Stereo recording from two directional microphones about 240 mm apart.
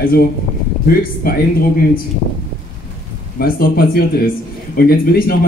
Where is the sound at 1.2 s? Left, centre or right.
Left.